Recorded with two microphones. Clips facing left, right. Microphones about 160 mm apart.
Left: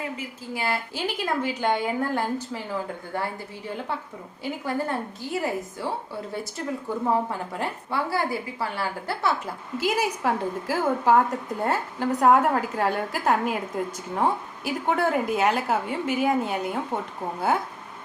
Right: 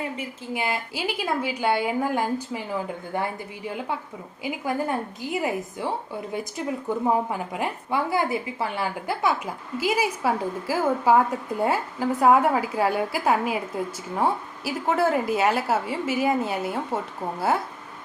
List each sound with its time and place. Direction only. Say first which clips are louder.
0.2 s a woman's voice: right 2 dB; 20° right (ahead or behind)
4.4 s a woman's voice: right 1 dB; 15° right (ahead or behind)